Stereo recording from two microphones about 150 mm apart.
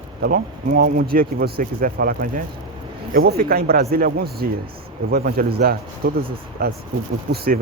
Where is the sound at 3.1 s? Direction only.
90° right.